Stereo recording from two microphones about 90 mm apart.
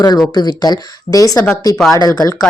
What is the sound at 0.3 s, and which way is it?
Speech, 50° left (ahead or behind).